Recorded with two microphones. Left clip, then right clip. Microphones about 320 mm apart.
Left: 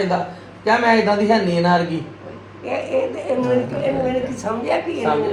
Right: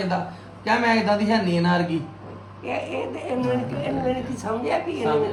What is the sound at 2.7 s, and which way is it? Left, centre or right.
A woman's voice, centre.